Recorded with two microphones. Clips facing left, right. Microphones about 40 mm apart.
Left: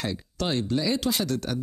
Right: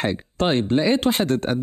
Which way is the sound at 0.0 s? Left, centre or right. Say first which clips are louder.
Right 8 dB; right.